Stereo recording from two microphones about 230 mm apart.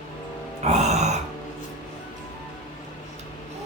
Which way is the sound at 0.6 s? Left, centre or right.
Right.